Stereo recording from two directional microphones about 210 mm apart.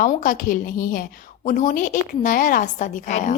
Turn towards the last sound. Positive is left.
turn(degrees=35)  # may be behind; listen again after turning